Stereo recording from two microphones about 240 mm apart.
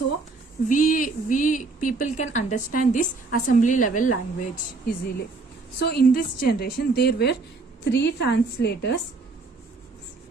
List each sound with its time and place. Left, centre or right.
0.7 s speech: left
5.8 s a woman's voice: left